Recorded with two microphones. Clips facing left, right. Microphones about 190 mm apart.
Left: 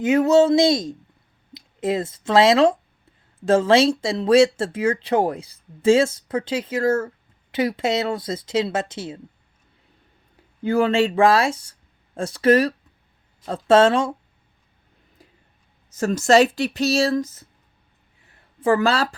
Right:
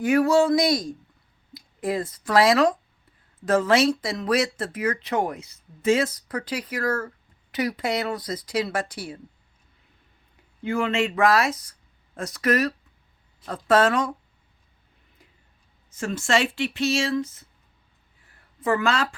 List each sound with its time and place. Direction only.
0.0 s speech: 20° left (ahead or behind)
10.6 s speech: 35° left (ahead or behind)
15.9 s speech: 40° left (ahead or behind)
18.6 s speech: 30° left (ahead or behind)